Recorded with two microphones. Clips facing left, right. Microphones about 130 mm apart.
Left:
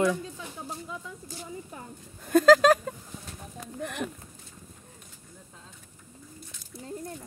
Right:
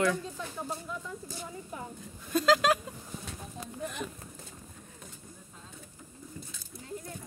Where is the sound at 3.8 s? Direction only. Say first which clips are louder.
Left 4 dB; 65° left (ahead or behind).